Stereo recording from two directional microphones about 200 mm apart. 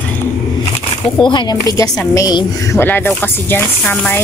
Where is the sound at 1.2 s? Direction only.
25° left (ahead or behind).